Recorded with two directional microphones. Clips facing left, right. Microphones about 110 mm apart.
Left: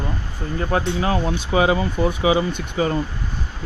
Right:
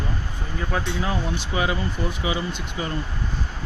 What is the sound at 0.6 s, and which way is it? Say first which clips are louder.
Speech: left 5 dB; 60° left (ahead or behind).